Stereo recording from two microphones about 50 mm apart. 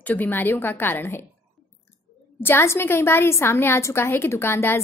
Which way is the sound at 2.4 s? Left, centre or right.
Left.